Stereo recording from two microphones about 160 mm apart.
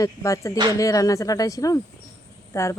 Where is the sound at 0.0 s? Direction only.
20° left (ahead or behind).